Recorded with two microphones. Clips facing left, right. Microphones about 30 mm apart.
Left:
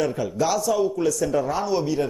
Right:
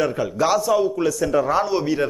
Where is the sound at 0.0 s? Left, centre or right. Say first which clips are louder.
Right 3 dB; right.